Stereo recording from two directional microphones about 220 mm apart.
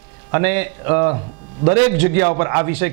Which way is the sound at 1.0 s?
25° right (ahead or behind).